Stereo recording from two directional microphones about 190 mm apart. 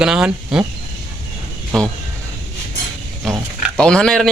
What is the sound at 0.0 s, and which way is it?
Speech, 5° right (ahead or behind).